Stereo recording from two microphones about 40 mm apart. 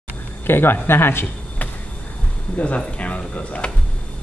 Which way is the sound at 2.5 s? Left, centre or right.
Left.